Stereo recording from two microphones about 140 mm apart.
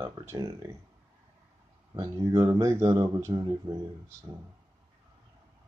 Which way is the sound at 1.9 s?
25° right (ahead or behind).